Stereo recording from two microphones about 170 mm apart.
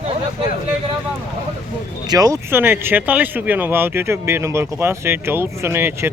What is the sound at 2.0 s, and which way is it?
Speech, 20° right (ahead or behind).